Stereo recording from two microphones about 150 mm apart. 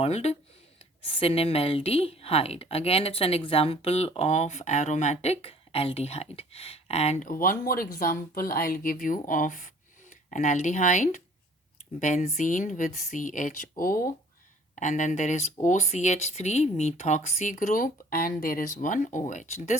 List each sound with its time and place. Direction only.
0.0 s speech: 45° left (ahead or behind)
7.3 s speech: 70° left (ahead or behind)
14.8 s speech: 55° left (ahead or behind)